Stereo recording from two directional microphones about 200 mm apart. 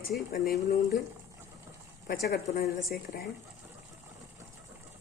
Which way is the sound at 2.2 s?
50° left (ahead or behind).